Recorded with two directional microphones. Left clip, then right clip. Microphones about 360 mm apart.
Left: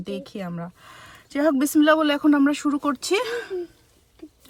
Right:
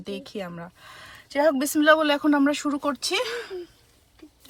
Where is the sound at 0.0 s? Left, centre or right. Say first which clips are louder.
Left 1 dB; centre.